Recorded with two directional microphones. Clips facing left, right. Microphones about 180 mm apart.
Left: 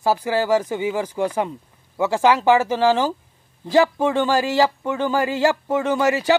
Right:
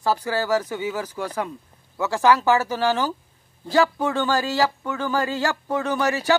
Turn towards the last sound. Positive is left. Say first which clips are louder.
# left 4 dB
turn(degrees=20)  # may be behind; listen again after turning